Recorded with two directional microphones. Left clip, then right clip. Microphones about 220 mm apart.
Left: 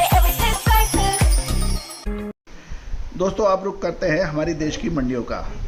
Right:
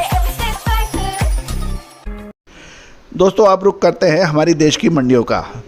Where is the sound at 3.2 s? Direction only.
45° right (ahead or behind).